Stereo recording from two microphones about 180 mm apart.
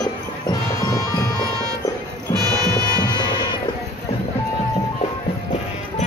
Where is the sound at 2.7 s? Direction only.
20° left (ahead or behind).